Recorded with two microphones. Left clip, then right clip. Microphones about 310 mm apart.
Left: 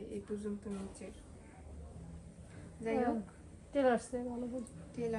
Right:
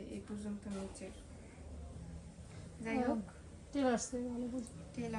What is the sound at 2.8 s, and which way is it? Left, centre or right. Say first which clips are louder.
Speech: left 3 dB; centre.